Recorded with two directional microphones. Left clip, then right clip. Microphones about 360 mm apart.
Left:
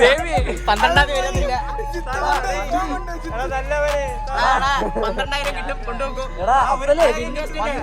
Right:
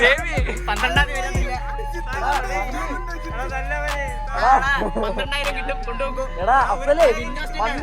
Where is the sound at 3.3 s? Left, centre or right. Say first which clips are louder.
Left 6 dB; left.